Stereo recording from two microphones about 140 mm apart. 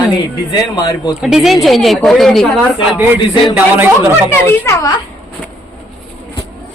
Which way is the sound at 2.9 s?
15° right (ahead or behind).